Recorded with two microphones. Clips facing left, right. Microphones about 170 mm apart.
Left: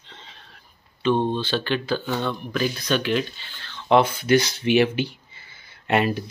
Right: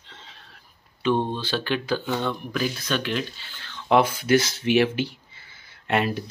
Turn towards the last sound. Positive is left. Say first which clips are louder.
# left 2 dB
turn(degrees=0)  # may be behind; listen again after turning